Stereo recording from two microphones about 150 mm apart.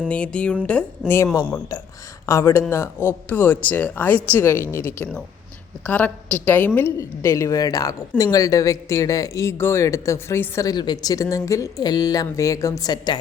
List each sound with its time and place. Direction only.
0.1 s speech: 5° left (ahead or behind); by 13.1 s 25° left (ahead or behind)